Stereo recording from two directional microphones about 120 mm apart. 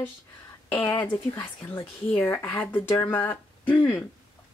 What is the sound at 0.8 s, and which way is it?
Speech, 15° left (ahead or behind).